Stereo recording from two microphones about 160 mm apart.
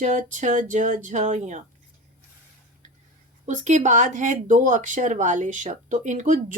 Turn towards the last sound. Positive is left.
turn(degrees=-55)  # may be behind; listen again after turning